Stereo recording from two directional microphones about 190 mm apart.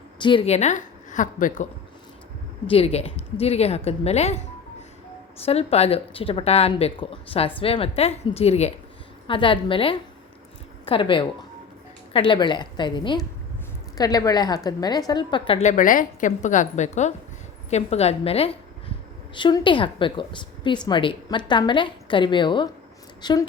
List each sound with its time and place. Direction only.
0.2 s a woman's voice: 25° left (ahead or behind); by 1.6 s 45° left (ahead or behind)
2.6 s speech: 30° left (ahead or behind)
5.5 s a woman's voice: 35° left (ahead or behind)
15.7 s a woman's voice: 45° left (ahead or behind); by 23.4 s 20° left (ahead or behind)